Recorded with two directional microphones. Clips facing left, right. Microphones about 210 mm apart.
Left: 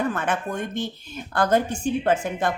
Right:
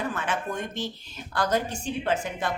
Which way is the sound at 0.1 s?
55° left (ahead or behind).